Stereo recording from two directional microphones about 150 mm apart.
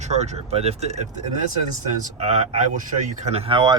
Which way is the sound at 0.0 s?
45° right (ahead or behind).